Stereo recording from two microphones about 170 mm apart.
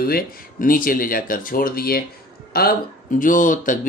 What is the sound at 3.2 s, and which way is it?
Speech, 50° left (ahead or behind).